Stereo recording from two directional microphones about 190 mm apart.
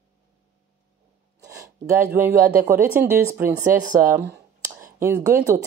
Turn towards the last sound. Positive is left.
turn(degrees=-15)  # may be behind; listen again after turning